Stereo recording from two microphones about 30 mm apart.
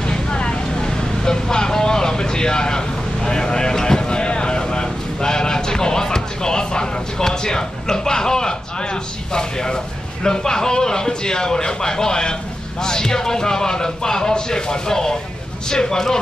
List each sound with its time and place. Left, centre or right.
0.0 s vehicle: left
9.3 s speech: left